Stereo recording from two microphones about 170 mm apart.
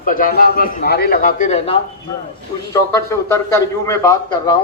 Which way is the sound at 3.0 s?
15° left (ahead or behind).